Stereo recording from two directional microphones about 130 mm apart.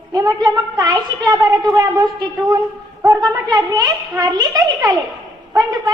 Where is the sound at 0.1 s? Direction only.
30° right (ahead or behind).